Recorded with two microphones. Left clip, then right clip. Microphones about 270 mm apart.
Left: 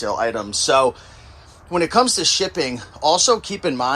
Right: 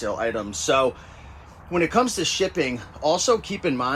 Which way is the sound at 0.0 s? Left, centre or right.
Centre.